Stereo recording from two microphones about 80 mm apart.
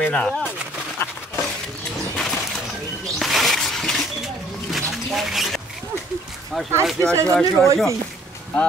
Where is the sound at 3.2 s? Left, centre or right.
Centre.